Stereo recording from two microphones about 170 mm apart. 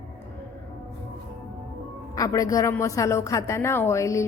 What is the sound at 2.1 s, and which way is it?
A woman's voice, 20° left (ahead or behind).